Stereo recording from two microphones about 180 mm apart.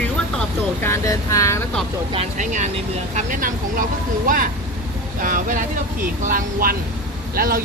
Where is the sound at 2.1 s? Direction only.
40° right (ahead or behind).